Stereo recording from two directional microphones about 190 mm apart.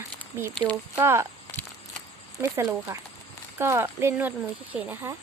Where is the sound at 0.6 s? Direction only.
15° right (ahead or behind).